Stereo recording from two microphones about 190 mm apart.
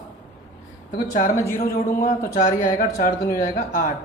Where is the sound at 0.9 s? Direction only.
45° left (ahead or behind).